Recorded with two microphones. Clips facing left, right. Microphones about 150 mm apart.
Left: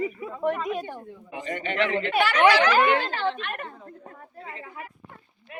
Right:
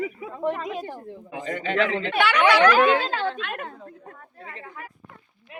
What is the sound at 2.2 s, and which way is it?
Speech, 75° right (ahead or behind).